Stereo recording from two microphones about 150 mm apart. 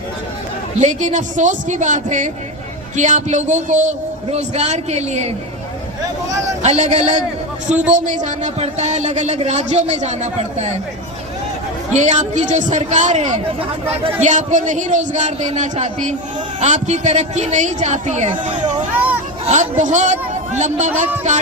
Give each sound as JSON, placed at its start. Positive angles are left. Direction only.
{"t": 0.8, "sound": "a man's voice", "side_deg": -50}
{"t": 6.6, "sound": "speech", "side_deg": -50}
{"t": 11.9, "sound": "speech", "side_deg": -50}